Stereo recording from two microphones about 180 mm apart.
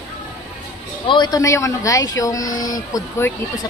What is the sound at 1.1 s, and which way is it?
Speech, 25° left (ahead or behind).